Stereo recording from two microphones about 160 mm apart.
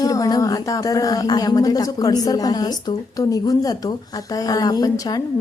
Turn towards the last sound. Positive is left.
turn(degrees=20)  # may be behind; listen again after turning